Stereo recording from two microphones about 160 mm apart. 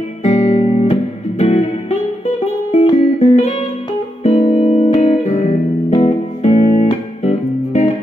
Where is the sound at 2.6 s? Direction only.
45° left (ahead or behind).